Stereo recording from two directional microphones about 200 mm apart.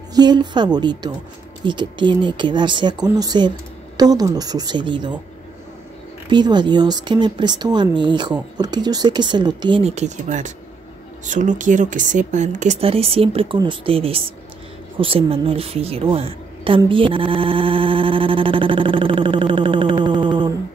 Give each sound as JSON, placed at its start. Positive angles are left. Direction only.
{"t": 0.1, "sound": "speech", "side_deg": -20}
{"t": 6.3, "sound": "speech", "side_deg": -20}